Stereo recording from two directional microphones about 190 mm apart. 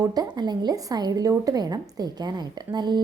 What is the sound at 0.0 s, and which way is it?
A woman's voice, 20° right (ahead or behind).